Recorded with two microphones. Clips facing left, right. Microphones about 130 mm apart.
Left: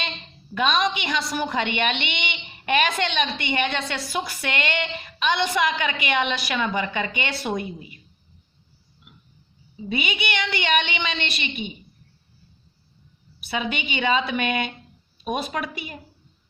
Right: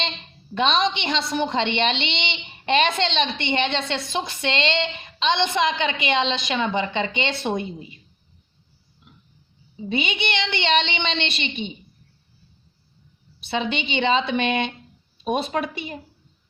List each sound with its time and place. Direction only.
0.5 s a woman's voice: 25° right (ahead or behind)
9.7 s a woman's voice: 25° right (ahead or behind)
13.4 s a woman's voice: 25° right (ahead or behind)